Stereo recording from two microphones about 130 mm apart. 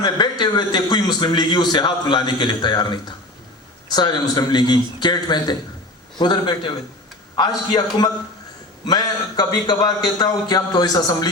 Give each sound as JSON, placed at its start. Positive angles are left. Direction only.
{"t": 0.0, "sound": "a man's voice", "side_deg": 35}